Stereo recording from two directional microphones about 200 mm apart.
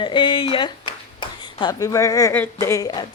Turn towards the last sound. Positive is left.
turn(degrees=20)  # may be behind; listen again after turning